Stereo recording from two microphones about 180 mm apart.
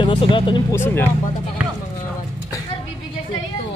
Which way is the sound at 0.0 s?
25° left (ahead or behind).